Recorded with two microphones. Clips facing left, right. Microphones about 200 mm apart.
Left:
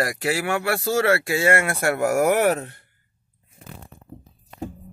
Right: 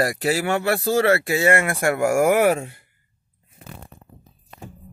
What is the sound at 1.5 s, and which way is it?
Speech, 15° right (ahead or behind).